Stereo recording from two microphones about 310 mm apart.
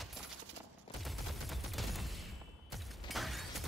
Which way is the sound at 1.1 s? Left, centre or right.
Centre.